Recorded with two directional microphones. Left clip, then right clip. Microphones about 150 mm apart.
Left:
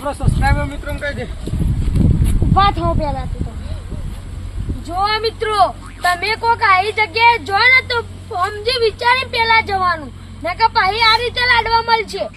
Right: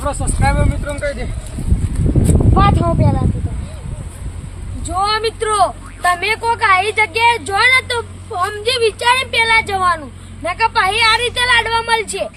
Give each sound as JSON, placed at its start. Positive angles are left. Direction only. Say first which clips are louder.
{"t": 0.0, "sound": "speech", "louder": "right 1 dB", "side_deg": 0}
{"t": 2.6, "sound": "speech", "louder": "left 1 dB", "side_deg": 0}
{"t": 4.9, "sound": "speech", "louder": "right 1 dB", "side_deg": 5}